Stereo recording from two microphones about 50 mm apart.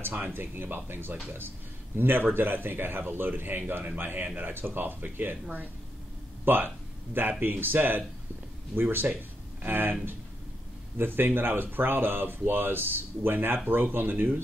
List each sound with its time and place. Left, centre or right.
0.0 s speech: right